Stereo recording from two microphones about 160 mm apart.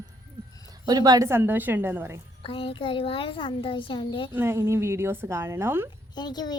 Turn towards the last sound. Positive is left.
turn(degrees=25)  # may be behind; listen again after turning